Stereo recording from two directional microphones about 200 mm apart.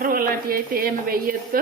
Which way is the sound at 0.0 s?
45° right (ahead or behind).